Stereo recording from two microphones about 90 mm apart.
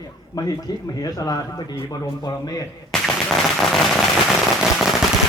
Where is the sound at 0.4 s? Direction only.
40° left (ahead or behind).